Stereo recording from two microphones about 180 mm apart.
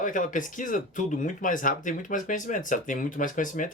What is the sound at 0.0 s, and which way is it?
Speech, 45° left (ahead or behind).